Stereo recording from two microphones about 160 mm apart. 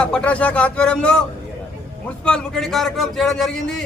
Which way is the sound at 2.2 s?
5° left (ahead or behind).